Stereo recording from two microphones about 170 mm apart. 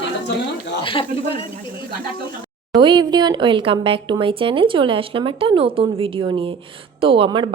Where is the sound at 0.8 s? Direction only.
30° left (ahead or behind).